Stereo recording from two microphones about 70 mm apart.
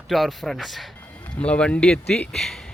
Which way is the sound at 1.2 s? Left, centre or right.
Centre.